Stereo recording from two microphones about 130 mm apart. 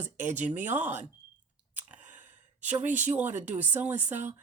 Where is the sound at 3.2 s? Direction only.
15° right (ahead or behind).